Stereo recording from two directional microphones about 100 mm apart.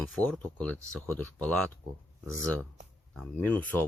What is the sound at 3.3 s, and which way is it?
Speech, 20° left (ahead or behind).